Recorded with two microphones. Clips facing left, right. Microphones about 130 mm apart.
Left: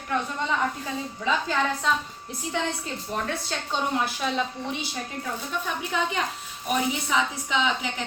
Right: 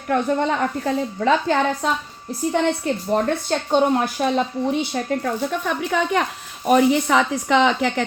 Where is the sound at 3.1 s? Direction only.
45° right (ahead or behind).